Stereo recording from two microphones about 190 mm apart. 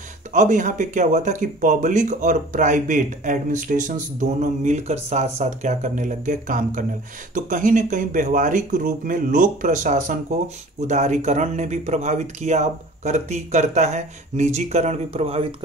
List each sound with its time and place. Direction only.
0.3 s speech: 40° right (ahead or behind)